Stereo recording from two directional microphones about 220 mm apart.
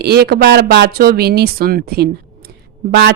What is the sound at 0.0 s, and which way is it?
A woman's voice, 45° right (ahead or behind).